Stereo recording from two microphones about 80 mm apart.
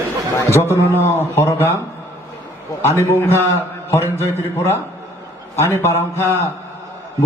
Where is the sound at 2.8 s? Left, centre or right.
Left.